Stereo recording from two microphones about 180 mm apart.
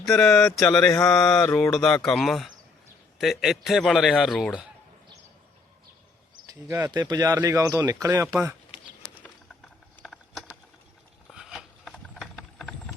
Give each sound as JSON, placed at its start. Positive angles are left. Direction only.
{"t": 0.0, "sound": "speech", "side_deg": 0}
{"t": 6.5, "sound": "speech", "side_deg": -15}
{"t": 10.0, "sound": "a sound", "side_deg": 5}
{"t": 11.3, "sound": "mechanisms", "side_deg": 0}